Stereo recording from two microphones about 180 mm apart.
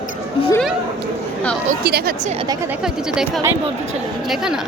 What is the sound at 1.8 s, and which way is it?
Speech, 60° right (ahead or behind).